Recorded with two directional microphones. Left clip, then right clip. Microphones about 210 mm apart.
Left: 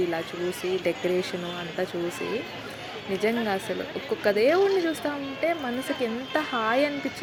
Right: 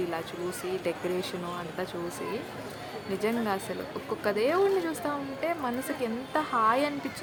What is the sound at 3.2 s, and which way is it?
Speech, 10° left (ahead or behind).